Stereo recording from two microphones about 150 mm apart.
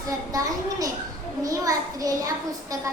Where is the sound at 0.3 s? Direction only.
25° right (ahead or behind).